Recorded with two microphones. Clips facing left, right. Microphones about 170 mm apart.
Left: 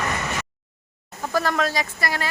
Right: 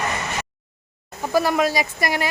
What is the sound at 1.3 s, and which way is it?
Speech, 10° right (ahead or behind).